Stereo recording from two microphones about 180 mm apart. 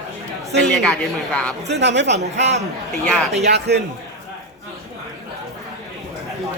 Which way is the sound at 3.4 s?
65° right (ahead or behind).